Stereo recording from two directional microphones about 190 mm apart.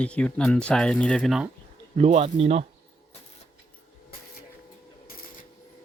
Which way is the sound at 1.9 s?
35° right (ahead or behind).